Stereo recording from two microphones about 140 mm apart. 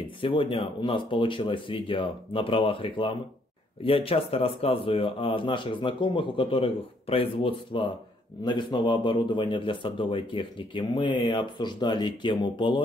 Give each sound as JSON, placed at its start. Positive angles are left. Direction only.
{"t": 0.2, "sound": "speech", "side_deg": 35}